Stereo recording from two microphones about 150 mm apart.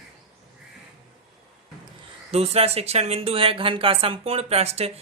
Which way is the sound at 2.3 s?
45° right (ahead or behind).